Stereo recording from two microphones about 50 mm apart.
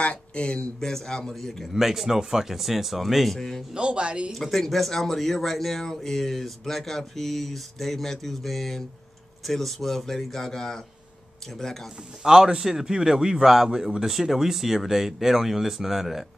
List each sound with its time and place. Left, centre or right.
0.0 s speech: left
0.7 s speech: centre
1.7 s speech: centre
3.7 s speech: centre
4.3 s speech: centre
12.2 s a man's voice: centre